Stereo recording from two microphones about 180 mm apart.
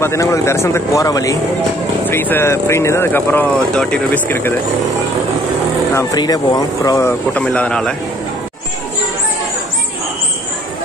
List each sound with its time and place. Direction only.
0.0 s speech: 15° left (ahead or behind)
5.9 s speech: 20° left (ahead or behind); by 7.9 s 5° left (ahead or behind)